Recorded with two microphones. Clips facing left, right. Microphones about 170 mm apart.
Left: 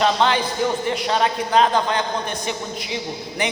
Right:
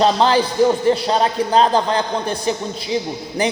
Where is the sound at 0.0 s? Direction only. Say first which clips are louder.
Right 4 dB; 35° right (ahead or behind).